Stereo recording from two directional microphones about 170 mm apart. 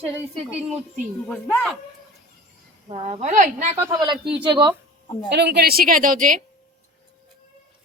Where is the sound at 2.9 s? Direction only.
40° right (ahead or behind).